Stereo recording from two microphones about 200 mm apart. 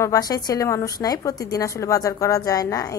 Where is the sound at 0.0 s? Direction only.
20° left (ahead or behind).